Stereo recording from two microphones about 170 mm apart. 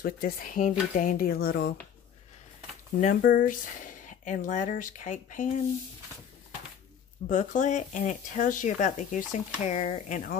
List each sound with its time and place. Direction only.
0.0 s speech: 55° left (ahead or behind)
3.0 s speech: 50° left (ahead or behind)
7.2 s speech: 50° left (ahead or behind)